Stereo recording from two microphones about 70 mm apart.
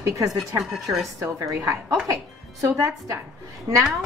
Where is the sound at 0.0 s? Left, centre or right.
Right.